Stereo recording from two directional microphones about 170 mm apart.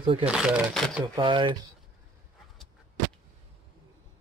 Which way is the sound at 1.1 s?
30° right (ahead or behind).